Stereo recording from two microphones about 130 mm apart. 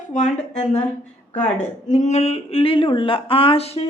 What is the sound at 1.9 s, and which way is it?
A woman's voice, 65° left (ahead or behind).